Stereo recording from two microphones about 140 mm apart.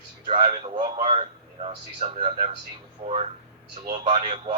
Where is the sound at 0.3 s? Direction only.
40° right (ahead or behind).